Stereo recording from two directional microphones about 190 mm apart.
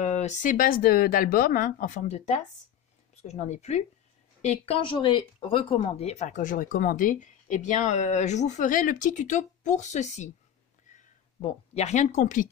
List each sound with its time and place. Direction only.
0.0 s speech: 35° left (ahead or behind)
11.4 s speech: 35° left (ahead or behind)